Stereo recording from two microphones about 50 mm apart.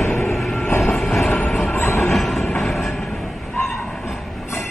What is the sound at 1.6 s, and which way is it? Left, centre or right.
Train, left.